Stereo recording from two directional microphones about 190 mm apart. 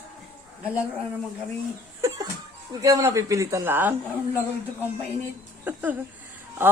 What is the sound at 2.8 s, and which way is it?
Speech, 15° right (ahead or behind).